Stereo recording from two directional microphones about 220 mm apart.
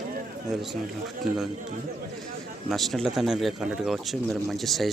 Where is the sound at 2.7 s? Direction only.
Centre (ahead or behind).